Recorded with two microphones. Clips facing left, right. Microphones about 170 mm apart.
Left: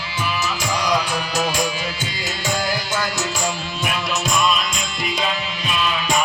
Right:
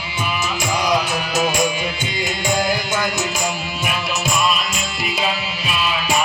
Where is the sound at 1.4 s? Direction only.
20° right (ahead or behind).